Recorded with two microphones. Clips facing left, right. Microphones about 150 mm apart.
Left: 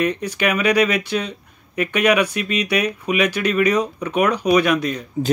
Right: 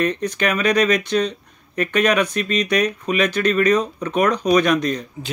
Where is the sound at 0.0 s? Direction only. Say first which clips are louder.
Even; 10° left (ahead or behind).